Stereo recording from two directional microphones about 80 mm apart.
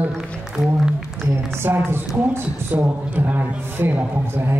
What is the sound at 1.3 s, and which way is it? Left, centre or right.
A man's voice, right.